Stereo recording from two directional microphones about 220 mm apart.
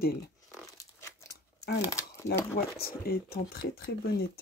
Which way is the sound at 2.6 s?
45° left (ahead or behind).